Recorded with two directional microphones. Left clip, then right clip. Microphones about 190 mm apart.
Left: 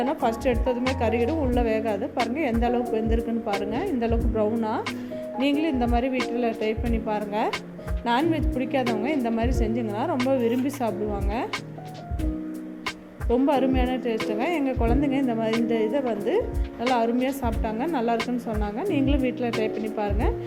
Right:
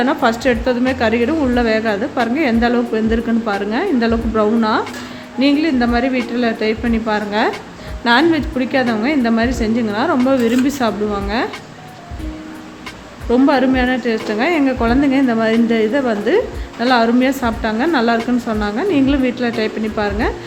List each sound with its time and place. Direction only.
0.0 s a woman's voice: 5° left (ahead or behind)
13.3 s a woman's voice: 5° left (ahead or behind)